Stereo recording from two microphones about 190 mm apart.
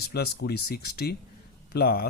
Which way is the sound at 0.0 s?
55° left (ahead or behind).